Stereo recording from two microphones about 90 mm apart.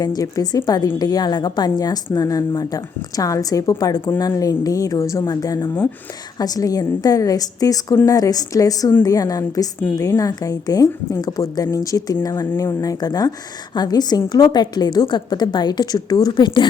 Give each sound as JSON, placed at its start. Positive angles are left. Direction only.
{"t": 0.0, "sound": "a woman's voice", "side_deg": 45}